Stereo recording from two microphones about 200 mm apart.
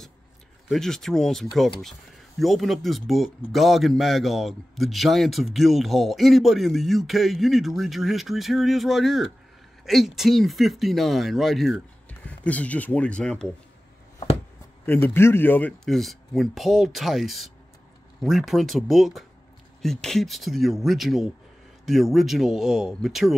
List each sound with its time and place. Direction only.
0.7 s a man's voice: centre (ahead or behind)
14.9 s a man's voice: 10° left (ahead or behind)